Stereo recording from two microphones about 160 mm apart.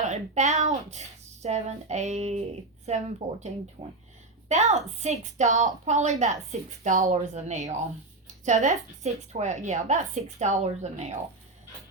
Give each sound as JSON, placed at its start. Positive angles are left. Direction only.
{"t": 0.0, "sound": "a woman's voice", "side_deg": -45}